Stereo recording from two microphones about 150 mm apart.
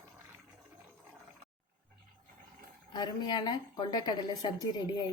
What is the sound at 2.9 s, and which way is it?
A woman's voice, 30° left (ahead or behind).